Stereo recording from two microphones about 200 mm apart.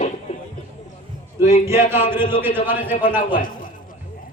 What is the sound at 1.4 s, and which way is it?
Speech, 35° left (ahead or behind).